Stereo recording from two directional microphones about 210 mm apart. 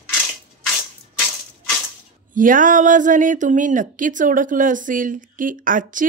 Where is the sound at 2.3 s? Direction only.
40° right (ahead or behind).